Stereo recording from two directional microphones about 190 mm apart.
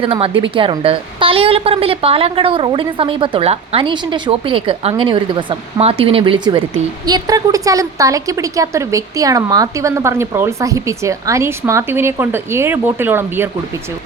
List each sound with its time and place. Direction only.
0.0 s a woman's voice: 30° right (ahead or behind); by 13.5 s 10° right (ahead or behind)